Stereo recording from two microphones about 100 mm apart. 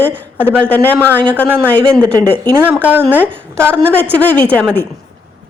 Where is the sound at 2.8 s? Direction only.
20° right (ahead or behind).